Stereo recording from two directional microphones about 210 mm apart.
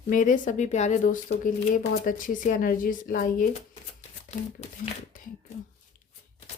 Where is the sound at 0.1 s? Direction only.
40° left (ahead or behind).